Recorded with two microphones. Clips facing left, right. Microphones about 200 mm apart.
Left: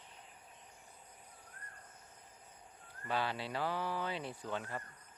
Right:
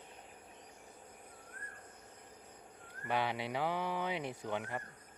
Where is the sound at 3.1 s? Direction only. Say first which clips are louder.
Right 2 dB; 15° right (ahead or behind).